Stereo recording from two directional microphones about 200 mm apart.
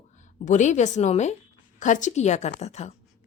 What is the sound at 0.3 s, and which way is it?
A woman's voice, 35° left (ahead or behind).